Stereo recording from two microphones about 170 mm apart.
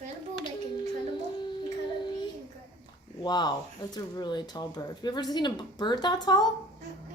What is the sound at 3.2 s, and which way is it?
A woman's voice, 25° left (ahead or behind).